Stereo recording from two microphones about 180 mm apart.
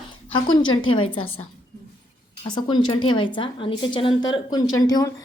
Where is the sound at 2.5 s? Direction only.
25° left (ahead or behind).